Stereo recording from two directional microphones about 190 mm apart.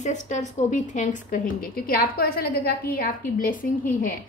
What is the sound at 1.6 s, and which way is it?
A woman's voice, 50° left (ahead or behind).